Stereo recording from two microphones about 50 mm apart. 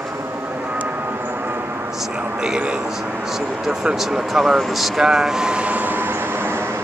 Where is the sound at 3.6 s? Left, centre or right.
Centre.